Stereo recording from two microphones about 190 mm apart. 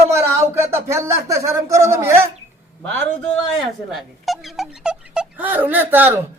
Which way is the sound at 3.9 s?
Centre (ahead or behind).